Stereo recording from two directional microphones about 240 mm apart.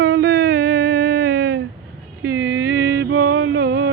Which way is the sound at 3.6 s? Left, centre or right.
Right.